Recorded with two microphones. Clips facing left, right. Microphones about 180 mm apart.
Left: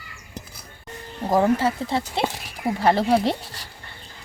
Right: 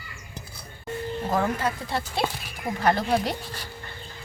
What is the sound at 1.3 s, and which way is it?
Speech, 30° left (ahead or behind).